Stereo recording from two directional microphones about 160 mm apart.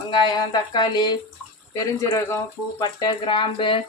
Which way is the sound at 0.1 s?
30° left (ahead or behind).